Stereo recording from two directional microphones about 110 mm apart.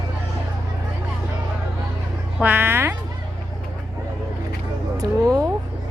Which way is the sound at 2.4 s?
15° right (ahead or behind).